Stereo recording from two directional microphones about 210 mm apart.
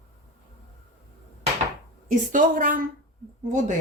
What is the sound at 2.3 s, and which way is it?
Speech, 40° right (ahead or behind).